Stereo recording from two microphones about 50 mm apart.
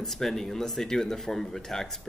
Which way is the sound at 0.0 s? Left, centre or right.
Centre.